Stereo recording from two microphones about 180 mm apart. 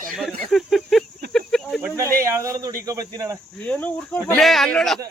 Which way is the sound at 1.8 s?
15° right (ahead or behind).